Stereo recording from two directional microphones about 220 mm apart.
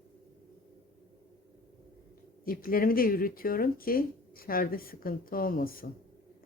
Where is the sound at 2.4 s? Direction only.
40° left (ahead or behind).